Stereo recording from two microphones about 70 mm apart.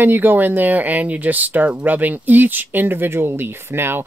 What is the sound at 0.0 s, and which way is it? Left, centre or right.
Speech, right.